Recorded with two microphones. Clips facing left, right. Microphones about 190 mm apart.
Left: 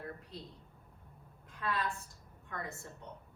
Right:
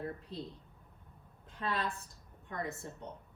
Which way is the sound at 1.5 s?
30° right (ahead or behind).